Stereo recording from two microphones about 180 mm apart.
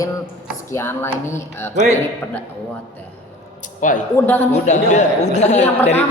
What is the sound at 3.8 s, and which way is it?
A woman's voice, 45° left (ahead or behind).